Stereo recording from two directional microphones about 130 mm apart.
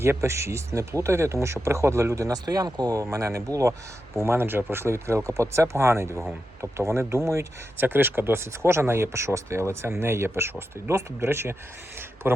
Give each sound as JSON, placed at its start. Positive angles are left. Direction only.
{"t": 0.0, "sound": "a man's voice", "side_deg": -20}